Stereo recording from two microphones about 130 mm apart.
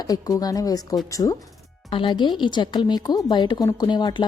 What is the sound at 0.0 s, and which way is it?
A woman's voice, 30° left (ahead or behind).